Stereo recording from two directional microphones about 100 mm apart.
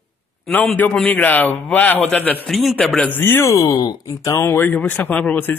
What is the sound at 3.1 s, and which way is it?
A man's voice, 20° left (ahead or behind).